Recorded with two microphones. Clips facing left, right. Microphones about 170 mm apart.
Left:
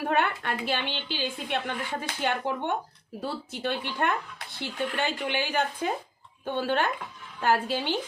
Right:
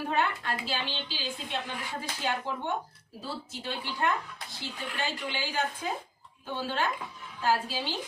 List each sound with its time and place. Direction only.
0.1 s a woman's voice: 60° left (ahead or behind)